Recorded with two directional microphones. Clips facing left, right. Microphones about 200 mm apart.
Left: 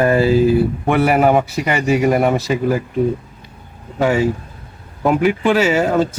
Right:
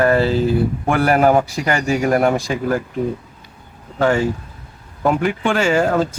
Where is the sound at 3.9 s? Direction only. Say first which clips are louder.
Left 1 dB; 5° left (ahead or behind).